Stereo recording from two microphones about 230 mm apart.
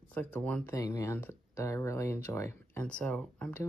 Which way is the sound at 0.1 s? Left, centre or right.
Centre.